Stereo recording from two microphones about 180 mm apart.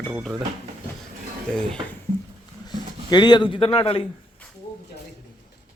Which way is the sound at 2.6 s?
25° left (ahead or behind).